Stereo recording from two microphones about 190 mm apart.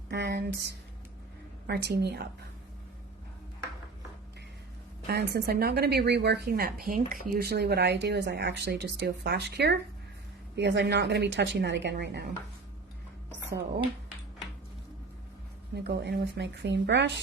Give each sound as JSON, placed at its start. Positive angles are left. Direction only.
{"t": 0.1, "sound": "a woman's voice", "side_deg": -60}
{"t": 1.6, "sound": "a woman's voice", "side_deg": -60}
{"t": 5.0, "sound": "a woman's voice", "side_deg": -55}
{"t": 15.7, "sound": "a woman's voice", "side_deg": -60}